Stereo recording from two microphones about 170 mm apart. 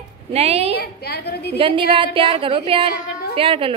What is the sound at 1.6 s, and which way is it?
A woman's voice, 30° right (ahead or behind).